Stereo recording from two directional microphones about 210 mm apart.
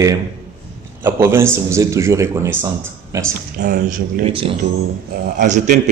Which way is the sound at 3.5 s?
45° right (ahead or behind).